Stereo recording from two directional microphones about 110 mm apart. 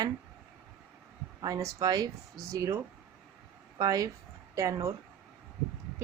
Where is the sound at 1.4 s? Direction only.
35° right (ahead or behind).